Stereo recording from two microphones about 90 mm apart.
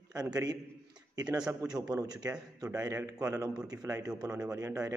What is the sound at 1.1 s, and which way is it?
Speech, 45° right (ahead or behind).